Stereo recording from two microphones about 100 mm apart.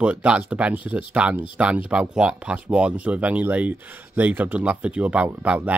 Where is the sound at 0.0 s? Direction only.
10° right (ahead or behind).